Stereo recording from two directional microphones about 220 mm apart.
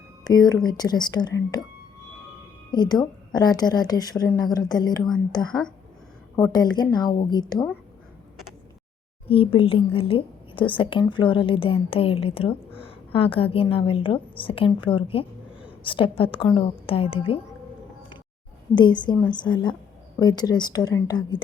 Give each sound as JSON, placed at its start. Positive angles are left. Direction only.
{"t": 0.3, "sound": "a woman's voice", "side_deg": 15}
{"t": 2.7, "sound": "a woman's voice", "side_deg": 20}
{"t": 5.5, "sound": "speech", "side_deg": 5}
{"t": 6.3, "sound": "a woman's voice", "side_deg": 15}
{"t": 9.3, "sound": "a woman's voice", "side_deg": 25}
{"t": 18.7, "sound": "a woman's voice", "side_deg": 20}